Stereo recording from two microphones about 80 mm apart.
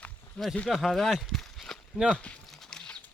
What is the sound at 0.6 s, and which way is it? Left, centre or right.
Speech, centre.